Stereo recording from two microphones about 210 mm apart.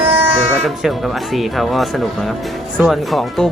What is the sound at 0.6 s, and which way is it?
Speech, centre (ahead or behind).